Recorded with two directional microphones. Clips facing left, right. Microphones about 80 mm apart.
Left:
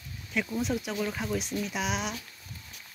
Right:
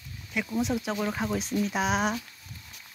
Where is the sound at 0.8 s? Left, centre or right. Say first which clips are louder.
Right 3 dB; right.